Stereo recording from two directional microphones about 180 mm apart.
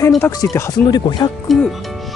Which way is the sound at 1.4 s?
Centre (ahead or behind).